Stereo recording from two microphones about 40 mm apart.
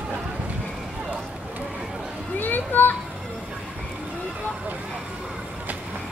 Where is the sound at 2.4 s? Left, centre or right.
Left.